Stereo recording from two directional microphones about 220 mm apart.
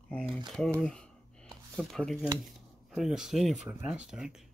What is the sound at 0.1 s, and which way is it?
Speech, 5° left (ahead or behind).